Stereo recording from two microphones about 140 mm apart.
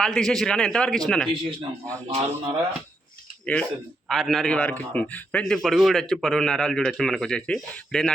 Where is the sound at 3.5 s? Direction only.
10° left (ahead or behind).